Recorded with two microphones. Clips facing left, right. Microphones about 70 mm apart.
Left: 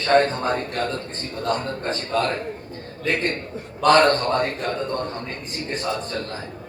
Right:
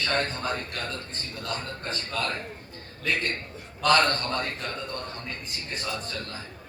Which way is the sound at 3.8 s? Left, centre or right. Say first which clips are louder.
Left 7 dB; left.